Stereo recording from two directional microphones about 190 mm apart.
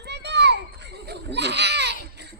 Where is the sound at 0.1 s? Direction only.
65° right (ahead or behind).